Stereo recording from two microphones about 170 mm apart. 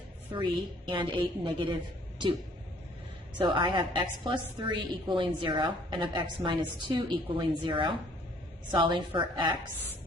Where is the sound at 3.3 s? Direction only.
25° right (ahead or behind).